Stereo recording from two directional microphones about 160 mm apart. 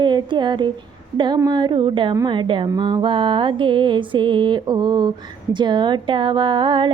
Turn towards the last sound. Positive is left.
turn(degrees=-30)  # may be behind; listen again after turning